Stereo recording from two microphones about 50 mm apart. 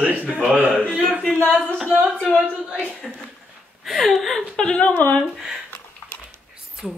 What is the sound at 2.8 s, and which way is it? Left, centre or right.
Speech, centre.